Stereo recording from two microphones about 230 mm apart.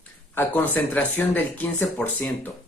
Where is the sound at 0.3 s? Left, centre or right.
Centre.